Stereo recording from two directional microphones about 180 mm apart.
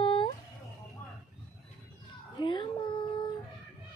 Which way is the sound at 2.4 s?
25° left (ahead or behind).